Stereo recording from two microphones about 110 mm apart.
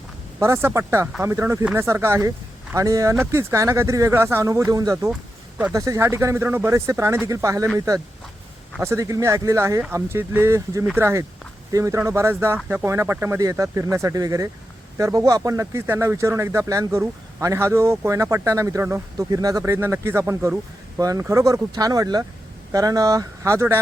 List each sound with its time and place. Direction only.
0.3 s speech: 25° right (ahead or behind)
19.1 s speech: 35° right (ahead or behind)